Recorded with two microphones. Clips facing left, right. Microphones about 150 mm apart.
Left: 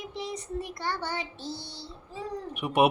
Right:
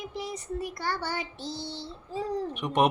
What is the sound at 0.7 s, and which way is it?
Speech, 25° left (ahead or behind).